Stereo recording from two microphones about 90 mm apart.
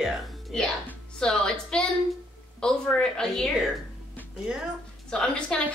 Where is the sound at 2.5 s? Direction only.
10° left (ahead or behind).